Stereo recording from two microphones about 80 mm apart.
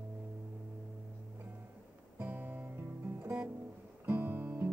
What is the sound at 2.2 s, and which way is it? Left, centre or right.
Music, right.